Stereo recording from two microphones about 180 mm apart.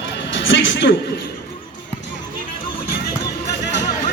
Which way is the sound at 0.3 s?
90° left.